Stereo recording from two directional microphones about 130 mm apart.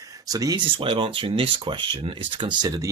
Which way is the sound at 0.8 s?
40° right (ahead or behind).